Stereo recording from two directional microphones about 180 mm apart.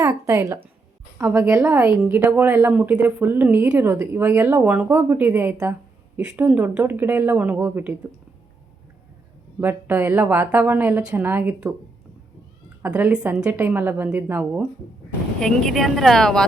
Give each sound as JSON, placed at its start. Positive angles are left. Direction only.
{"t": 0.0, "sound": "a woman's voice", "side_deg": -15}
{"t": 9.6, "sound": "speech", "side_deg": -10}
{"t": 12.8, "sound": "speech", "side_deg": -10}
{"t": 15.4, "sound": "speech", "side_deg": 5}